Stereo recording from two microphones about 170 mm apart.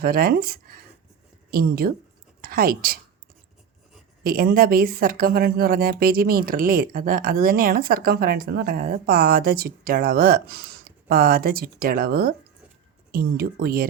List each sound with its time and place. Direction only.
0.0 s a woman's voice: 60° right (ahead or behind)
4.2 s speech: 60° right (ahead or behind)